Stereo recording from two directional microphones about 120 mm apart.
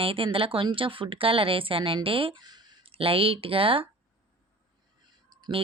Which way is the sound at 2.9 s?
50° right (ahead or behind).